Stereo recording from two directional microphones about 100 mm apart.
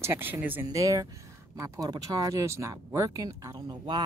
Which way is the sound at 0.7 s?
35° right (ahead or behind).